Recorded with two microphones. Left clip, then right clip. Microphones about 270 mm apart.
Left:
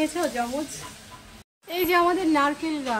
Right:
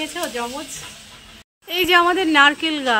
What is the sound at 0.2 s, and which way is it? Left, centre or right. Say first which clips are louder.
Speech: even; centre.